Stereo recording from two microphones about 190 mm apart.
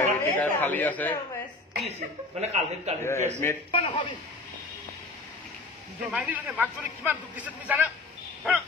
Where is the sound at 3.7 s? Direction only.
30° left (ahead or behind).